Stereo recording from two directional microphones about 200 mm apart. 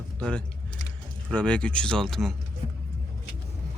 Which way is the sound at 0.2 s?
5° left (ahead or behind).